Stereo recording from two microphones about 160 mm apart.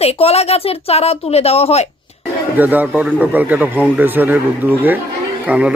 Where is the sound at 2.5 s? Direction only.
10° right (ahead or behind).